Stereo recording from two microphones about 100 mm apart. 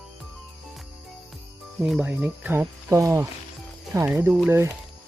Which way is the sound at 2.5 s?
25° right (ahead or behind).